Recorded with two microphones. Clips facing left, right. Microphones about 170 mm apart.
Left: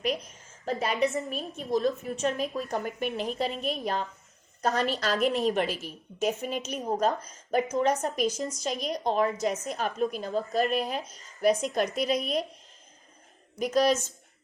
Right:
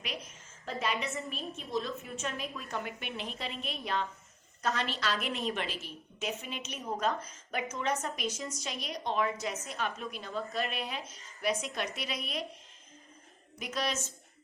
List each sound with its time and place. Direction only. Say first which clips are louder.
0.6 s a woman's voice: left 8 dB; 45° left (ahead or behind)
13.6 s a woman's voice: left 11 dB; 40° left (ahead or behind)